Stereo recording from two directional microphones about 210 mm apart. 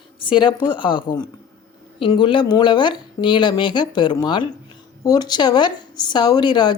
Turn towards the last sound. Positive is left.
turn(degrees=20)  # may be behind; listen again after turning